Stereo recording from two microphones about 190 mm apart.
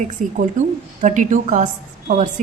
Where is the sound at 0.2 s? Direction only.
45° right (ahead or behind).